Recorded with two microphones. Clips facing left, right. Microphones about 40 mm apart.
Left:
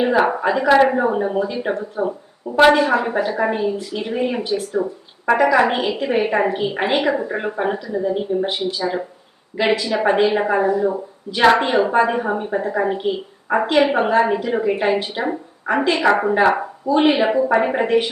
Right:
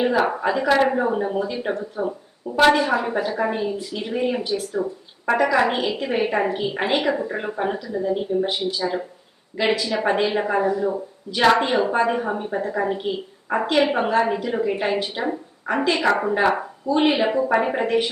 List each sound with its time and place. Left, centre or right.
0.0 s a woman's voice: centre
15.9 s a woman's voice: centre